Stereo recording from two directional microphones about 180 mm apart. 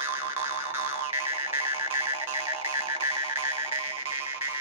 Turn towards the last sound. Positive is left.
turn(degrees=-15)  # may be behind; listen again after turning